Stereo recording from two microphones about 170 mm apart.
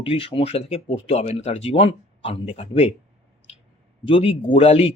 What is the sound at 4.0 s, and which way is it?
Speech, 35° left (ahead or behind).